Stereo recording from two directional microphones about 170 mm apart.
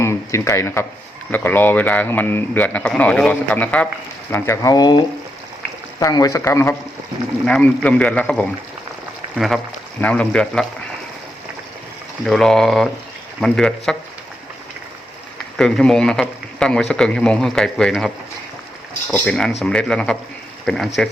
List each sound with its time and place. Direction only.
0.0 s speech: 15° left (ahead or behind)
12.2 s speech: centre (ahead or behind)
15.5 s speech: 5° left (ahead or behind)
19.1 s speech: 5° left (ahead or behind)